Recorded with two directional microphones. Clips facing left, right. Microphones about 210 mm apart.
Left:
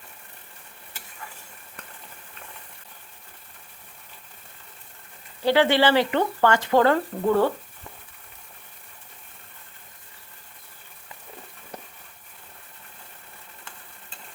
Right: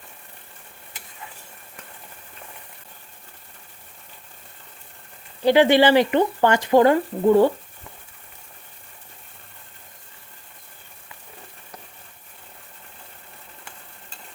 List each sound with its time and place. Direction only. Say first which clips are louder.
5.5 s speech: right 4 dB; 15° right (ahead or behind)